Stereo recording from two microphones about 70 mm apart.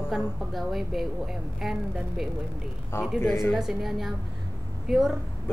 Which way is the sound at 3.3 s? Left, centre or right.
Centre.